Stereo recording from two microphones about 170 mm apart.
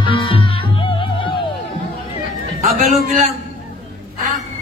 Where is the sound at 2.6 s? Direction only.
45° right (ahead or behind).